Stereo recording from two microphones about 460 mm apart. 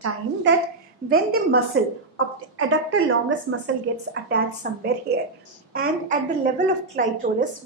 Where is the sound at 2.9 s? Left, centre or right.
Right.